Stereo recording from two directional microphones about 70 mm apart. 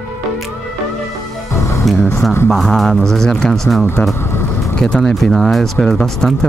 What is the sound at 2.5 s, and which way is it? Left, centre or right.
Speech, centre.